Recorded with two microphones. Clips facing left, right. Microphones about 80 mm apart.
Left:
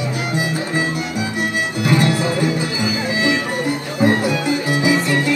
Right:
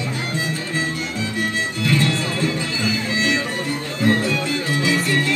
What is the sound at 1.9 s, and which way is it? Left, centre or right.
Music, centre.